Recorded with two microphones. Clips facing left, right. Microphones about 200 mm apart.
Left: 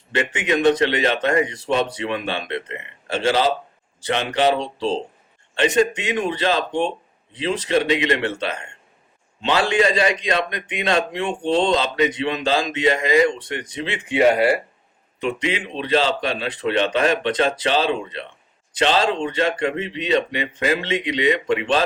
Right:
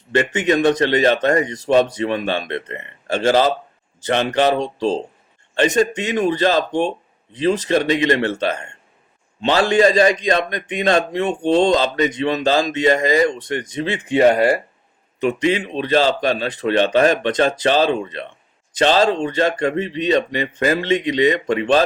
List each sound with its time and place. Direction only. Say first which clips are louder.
0.3 s a man's voice: even; 40° right (ahead or behind)